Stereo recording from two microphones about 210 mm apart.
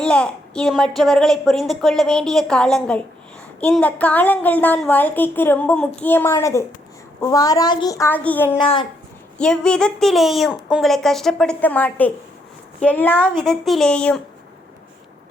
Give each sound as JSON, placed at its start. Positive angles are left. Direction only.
{"t": 0.0, "sound": "a woman's voice", "side_deg": 5}
{"t": 8.5, "sound": "speech", "side_deg": 25}
{"t": 9.4, "sound": "a woman's voice", "side_deg": 5}